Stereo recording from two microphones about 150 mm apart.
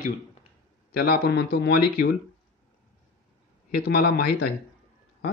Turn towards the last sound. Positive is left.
turn(degrees=90)